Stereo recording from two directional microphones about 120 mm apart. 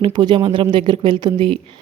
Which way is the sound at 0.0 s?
40° right (ahead or behind).